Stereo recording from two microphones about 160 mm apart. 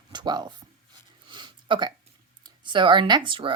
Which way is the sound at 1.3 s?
30° right (ahead or behind).